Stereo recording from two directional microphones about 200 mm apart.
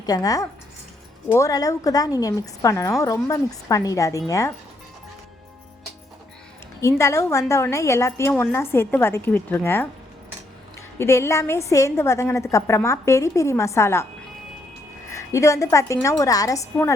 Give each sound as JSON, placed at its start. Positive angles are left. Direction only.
{"t": 0.0, "sound": "a woman's voice", "side_deg": 20}
{"t": 6.8, "sound": "a woman's voice", "side_deg": 15}
{"t": 10.9, "sound": "a woman's voice", "side_deg": 15}
{"t": 15.1, "sound": "a woman's voice", "side_deg": 15}